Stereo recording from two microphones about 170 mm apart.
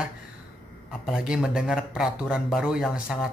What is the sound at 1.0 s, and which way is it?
Speech, 5° right (ahead or behind).